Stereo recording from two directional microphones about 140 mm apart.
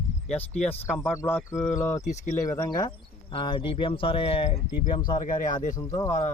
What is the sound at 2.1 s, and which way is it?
Speech, 65° left (ahead or behind).